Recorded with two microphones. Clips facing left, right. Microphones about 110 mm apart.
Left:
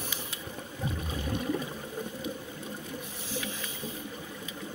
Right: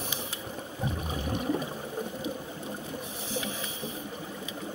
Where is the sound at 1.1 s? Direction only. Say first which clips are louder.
Right 1 dB; 20° right (ahead or behind).